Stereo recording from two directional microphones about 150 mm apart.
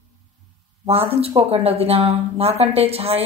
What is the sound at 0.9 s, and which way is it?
Speech, 40° right (ahead or behind).